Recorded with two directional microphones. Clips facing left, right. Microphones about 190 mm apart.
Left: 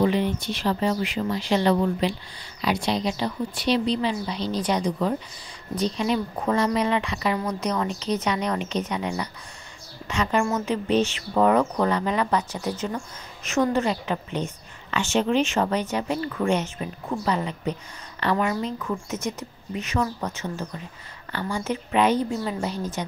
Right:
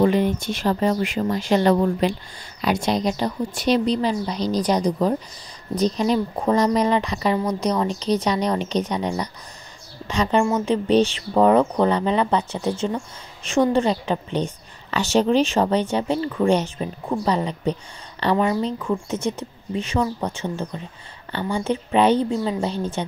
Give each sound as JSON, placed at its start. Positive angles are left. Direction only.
{"t": 0.0, "sound": "speech", "side_deg": -45}